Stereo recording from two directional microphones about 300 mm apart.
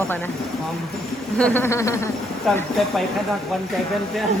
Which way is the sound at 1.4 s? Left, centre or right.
Centre.